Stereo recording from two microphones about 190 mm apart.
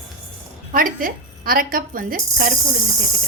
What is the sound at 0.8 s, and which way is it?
A woman's voice, 45° right (ahead or behind).